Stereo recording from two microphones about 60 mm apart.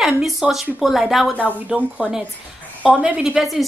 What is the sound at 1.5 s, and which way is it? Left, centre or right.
Speech, right.